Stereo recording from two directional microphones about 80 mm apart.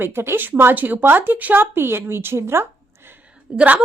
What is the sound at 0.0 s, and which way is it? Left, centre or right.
Speech, right.